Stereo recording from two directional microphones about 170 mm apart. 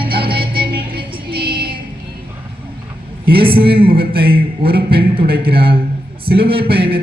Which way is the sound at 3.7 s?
30° right (ahead or behind).